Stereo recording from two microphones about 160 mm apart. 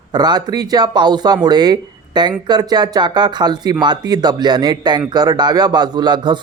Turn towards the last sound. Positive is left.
turn(degrees=-25)  # may be behind; listen again after turning